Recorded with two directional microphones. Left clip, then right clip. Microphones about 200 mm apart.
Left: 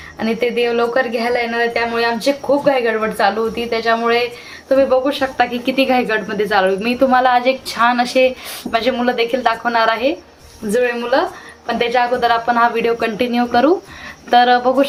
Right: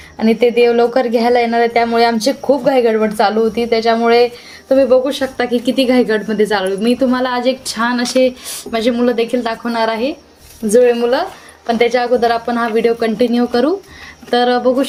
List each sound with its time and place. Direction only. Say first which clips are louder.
0.2 s a woman's voice: right 6 dB; 55° right (ahead or behind); by 14.8 s 35° right (ahead or behind)